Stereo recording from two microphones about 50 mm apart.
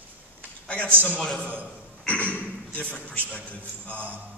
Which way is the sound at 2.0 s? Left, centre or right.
Left.